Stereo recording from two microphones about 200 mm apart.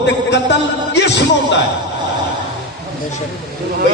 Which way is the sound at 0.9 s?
60° left (ahead or behind).